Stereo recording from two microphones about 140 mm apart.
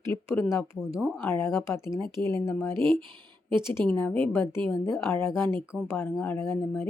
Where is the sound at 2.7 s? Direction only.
35° right (ahead or behind).